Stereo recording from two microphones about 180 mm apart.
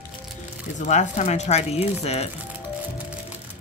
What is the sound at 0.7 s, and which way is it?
Speech, 40° left (ahead or behind).